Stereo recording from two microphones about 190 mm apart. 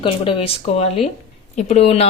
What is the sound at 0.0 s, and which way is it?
Speech, 30° left (ahead or behind).